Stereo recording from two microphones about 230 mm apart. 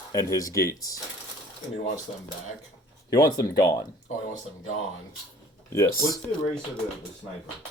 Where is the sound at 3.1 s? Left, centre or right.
Centre.